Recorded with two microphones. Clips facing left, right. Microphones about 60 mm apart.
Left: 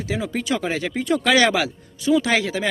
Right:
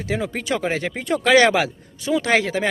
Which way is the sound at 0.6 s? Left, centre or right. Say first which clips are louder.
Even; right.